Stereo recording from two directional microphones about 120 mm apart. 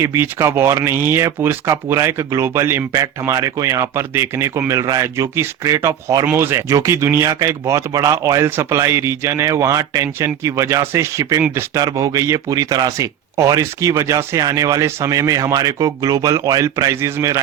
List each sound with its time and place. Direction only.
0.0 s speech: 20° right (ahead or behind)